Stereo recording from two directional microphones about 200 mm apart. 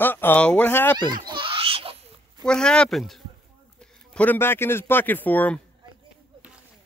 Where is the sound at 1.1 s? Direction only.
25° right (ahead or behind).